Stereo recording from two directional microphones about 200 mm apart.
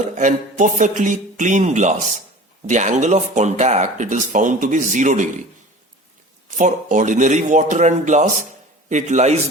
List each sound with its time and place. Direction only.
0.1 s speech: 40° right (ahead or behind)
6.6 s speech: 40° right (ahead or behind)